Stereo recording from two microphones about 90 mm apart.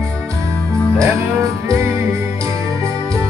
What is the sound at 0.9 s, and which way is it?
Music, 35° right (ahead or behind).